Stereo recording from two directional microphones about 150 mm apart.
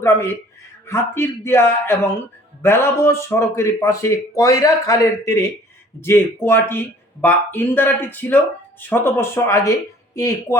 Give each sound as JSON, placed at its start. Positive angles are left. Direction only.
{"t": 0.0, "sound": "a man's voice", "side_deg": 15}